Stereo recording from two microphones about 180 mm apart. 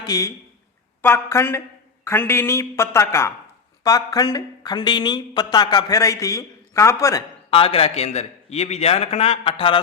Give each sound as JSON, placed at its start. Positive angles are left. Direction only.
{"t": 0.0, "sound": "a man's voice", "side_deg": 20}
{"t": 7.5, "sound": "a man's voice", "side_deg": 30}